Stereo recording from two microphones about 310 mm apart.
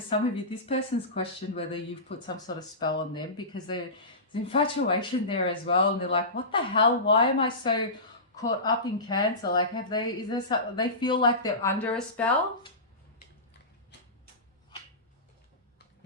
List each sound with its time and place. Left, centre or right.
0.1 s speech: centre